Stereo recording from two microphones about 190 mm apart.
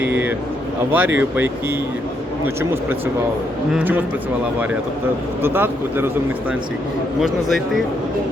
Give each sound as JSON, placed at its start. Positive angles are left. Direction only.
{"t": 0.0, "sound": "a sound", "side_deg": -10}
{"t": 0.9, "sound": "speech", "side_deg": -10}
{"t": 5.4, "sound": "speech", "side_deg": -10}
{"t": 7.2, "sound": "a man's voice", "side_deg": 0}